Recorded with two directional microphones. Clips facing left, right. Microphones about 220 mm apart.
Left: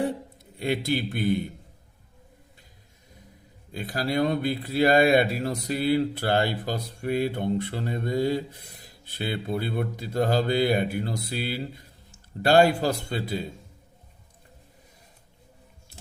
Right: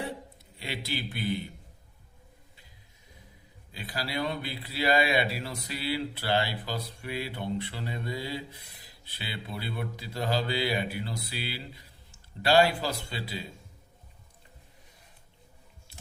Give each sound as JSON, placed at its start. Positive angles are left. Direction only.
{"t": 0.5, "sound": "a man's voice", "side_deg": 50}
{"t": 3.7, "sound": "a man's voice", "side_deg": 50}